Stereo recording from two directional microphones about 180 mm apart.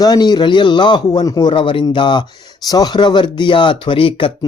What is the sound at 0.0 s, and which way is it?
Speech, 25° left (ahead or behind).